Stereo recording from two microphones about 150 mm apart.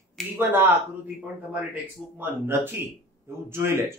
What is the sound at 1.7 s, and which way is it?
A man's voice, 10° right (ahead or behind).